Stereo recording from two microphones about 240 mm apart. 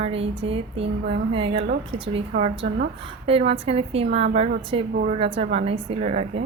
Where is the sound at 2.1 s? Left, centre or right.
Right.